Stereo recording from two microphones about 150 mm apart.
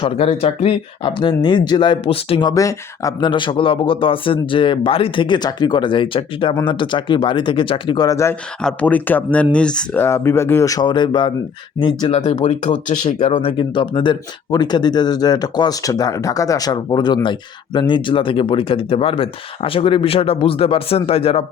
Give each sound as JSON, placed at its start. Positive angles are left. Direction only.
{"t": 0.0, "sound": "speech", "side_deg": 45}
{"t": 1.0, "sound": "speech", "side_deg": 30}
{"t": 2.5, "sound": "speech", "side_deg": 20}
{"t": 12.1, "sound": "speech", "side_deg": 45}
{"t": 13.3, "sound": "speech", "side_deg": 35}